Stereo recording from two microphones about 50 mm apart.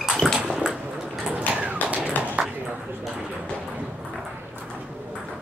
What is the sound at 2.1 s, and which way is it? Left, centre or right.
Ping, left.